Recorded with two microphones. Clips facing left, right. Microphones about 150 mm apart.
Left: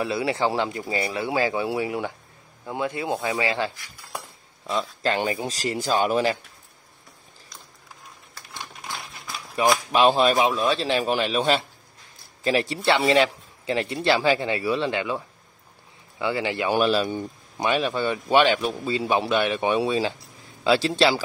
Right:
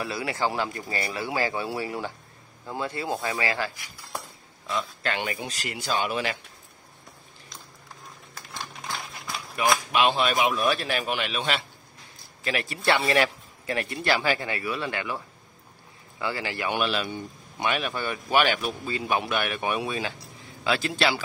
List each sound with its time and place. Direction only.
0.0 s speech: 25° left (ahead or behind)
4.7 s speech: 30° left (ahead or behind)
9.6 s speech: 30° left (ahead or behind)
10.5 s speech: 25° left (ahead or behind)
16.7 s a man's voice: 35° left (ahead or behind)